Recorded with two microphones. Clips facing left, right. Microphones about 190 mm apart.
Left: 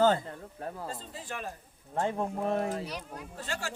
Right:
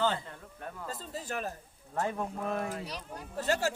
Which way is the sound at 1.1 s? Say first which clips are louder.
Right 3 dB; 40° right (ahead or behind).